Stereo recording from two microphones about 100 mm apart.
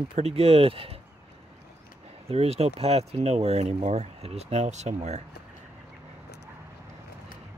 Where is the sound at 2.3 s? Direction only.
90° right.